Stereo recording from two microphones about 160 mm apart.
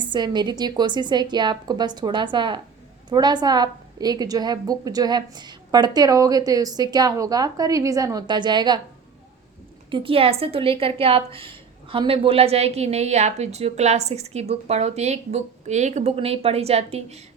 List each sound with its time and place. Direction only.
0.1 s a woman's voice: 30° right (ahead or behind)
9.9 s a woman's voice: 35° right (ahead or behind)